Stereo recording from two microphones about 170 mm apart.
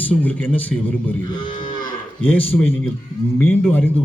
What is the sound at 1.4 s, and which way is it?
Cattle, 50° left (ahead or behind).